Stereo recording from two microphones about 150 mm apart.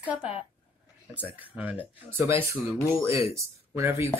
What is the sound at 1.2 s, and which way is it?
Speech, 10° right (ahead or behind).